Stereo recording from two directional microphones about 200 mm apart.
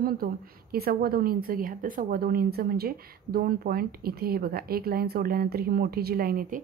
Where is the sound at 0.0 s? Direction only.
50° right (ahead or behind).